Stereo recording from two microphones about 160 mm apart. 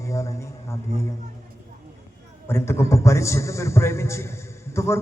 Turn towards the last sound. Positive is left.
turn(degrees=15)  # may be behind; listen again after turning